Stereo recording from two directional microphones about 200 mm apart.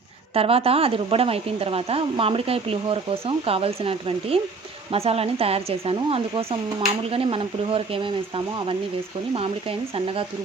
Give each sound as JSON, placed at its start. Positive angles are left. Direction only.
{"t": 0.3, "sound": "speech", "side_deg": -30}
{"t": 9.3, "sound": "speech", "side_deg": -30}